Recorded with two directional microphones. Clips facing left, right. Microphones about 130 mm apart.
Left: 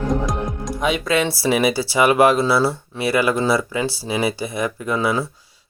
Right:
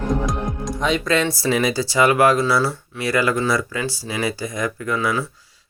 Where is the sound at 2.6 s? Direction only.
30° left (ahead or behind).